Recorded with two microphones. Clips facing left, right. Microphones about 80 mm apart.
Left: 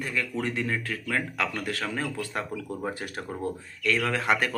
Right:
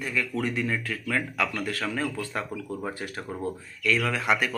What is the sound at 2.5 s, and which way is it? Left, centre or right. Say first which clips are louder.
Speech: even; right.